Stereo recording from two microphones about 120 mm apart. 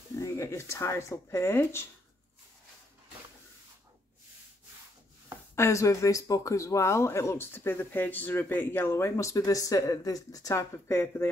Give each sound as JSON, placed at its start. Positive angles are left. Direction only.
{"t": 0.2, "sound": "speech", "side_deg": 25}
{"t": 5.6, "sound": "speech", "side_deg": 25}